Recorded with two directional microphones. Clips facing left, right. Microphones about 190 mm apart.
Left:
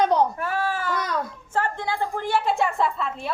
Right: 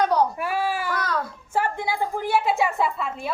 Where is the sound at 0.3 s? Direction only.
10° right (ahead or behind).